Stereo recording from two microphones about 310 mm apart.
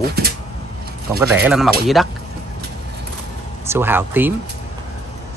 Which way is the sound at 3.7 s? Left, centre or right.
Centre.